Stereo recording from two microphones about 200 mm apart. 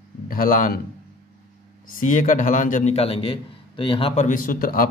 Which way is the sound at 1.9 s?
40° left (ahead or behind).